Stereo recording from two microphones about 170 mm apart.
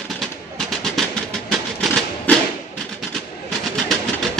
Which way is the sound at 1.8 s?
Centre (ahead or behind).